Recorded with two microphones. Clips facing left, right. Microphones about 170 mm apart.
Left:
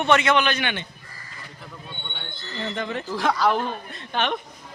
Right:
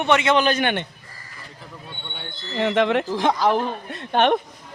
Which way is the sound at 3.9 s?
55° right (ahead or behind).